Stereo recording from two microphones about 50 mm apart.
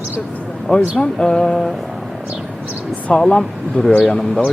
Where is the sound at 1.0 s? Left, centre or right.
Centre.